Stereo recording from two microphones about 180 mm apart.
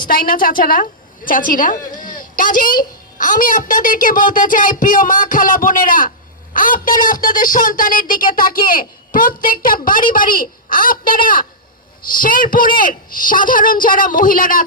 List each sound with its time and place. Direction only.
0.1 s a woman's voice: 50° left (ahead or behind)